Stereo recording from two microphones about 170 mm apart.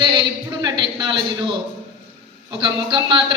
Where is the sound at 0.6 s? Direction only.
25° right (ahead or behind).